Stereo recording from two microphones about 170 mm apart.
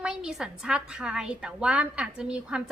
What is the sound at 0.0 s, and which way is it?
A woman's voice, 5° right (ahead or behind).